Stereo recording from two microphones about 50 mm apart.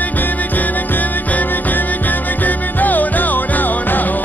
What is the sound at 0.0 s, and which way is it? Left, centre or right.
Music, left.